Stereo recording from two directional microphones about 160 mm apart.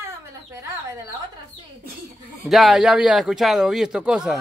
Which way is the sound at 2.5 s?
Centre (ahead or behind).